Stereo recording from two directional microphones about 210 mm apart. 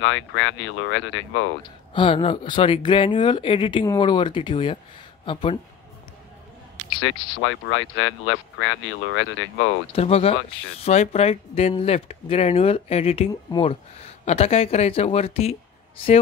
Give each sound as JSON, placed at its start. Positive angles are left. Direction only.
{"t": 0.0, "sound": "speech", "side_deg": 65}
{"t": 2.0, "sound": "speech", "side_deg": 25}
{"t": 7.4, "sound": "speech", "side_deg": 70}
{"t": 9.9, "sound": "speech", "side_deg": 30}